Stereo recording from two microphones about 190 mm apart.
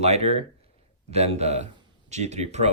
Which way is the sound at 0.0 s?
35° right (ahead or behind).